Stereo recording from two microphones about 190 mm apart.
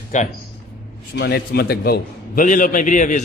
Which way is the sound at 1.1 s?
60° left (ahead or behind).